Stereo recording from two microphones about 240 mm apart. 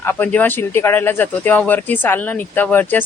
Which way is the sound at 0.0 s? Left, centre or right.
Centre.